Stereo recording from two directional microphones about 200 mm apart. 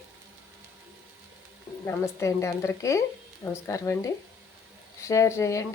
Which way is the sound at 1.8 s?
15° left (ahead or behind).